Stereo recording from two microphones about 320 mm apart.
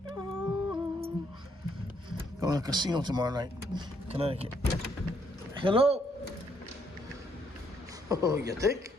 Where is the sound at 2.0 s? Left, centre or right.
Centre.